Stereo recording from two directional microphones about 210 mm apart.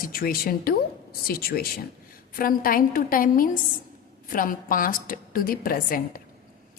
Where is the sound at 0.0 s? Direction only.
45° left (ahead or behind).